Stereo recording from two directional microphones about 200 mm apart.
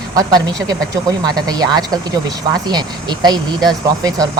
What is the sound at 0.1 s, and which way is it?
Speech, 20° right (ahead or behind).